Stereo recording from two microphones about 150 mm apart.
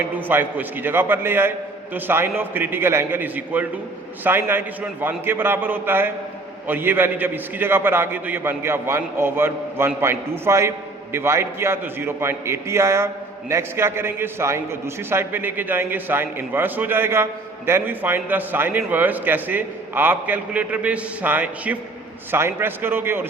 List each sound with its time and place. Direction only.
0.0 s a man's voice: 10° right (ahead or behind)